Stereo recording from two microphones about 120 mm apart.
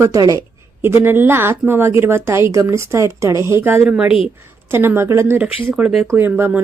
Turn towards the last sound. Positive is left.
turn(degrees=-15)  # may be behind; listen again after turning